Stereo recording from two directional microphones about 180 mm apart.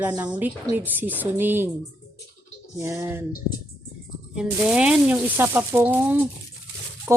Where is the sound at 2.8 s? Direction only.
15° right (ahead or behind).